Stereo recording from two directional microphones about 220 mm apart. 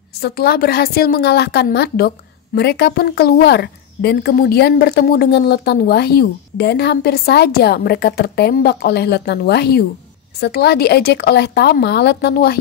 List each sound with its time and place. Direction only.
0.2 s a woman's voice: 45° left (ahead or behind)